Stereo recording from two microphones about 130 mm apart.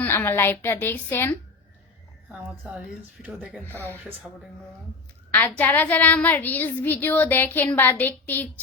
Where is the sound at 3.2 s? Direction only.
5° right (ahead or behind).